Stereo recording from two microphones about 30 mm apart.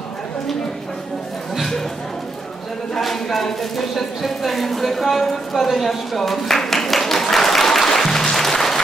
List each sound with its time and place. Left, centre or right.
3.0 s speech: centre
6.1 s applause: centre